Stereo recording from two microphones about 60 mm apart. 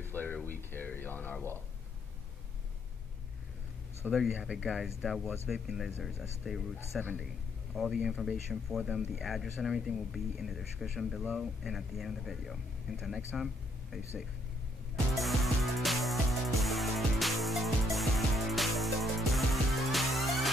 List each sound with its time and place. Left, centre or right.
0.0 s a sound: left
0.6 s speech: left
4.1 s speech: centre
4.4 s speech: centre
13.4 s a sound: centre
15.1 s music: centre